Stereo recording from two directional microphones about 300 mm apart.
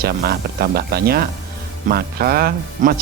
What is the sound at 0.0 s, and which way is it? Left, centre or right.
Speech, right.